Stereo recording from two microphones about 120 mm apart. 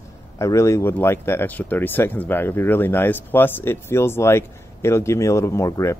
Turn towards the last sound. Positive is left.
turn(degrees=25)  # may be behind; listen again after turning